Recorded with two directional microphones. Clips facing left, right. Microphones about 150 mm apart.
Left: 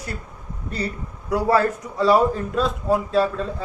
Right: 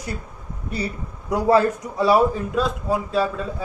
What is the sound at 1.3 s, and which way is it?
A man's voice, 20° right (ahead or behind).